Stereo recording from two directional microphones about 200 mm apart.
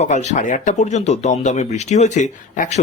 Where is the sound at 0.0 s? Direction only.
35° left (ahead or behind).